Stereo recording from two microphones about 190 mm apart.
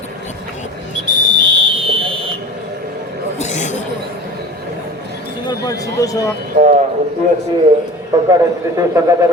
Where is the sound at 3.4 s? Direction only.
40° left (ahead or behind).